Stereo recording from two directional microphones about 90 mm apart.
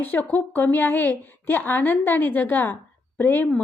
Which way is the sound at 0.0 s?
20° left (ahead or behind).